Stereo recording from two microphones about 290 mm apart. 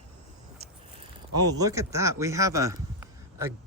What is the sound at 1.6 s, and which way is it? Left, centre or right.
A man's voice, centre.